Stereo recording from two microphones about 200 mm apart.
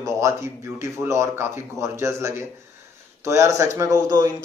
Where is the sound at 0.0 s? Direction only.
15° right (ahead or behind).